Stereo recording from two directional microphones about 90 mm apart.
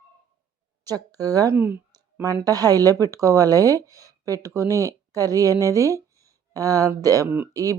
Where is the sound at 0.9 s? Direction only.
45° right (ahead or behind).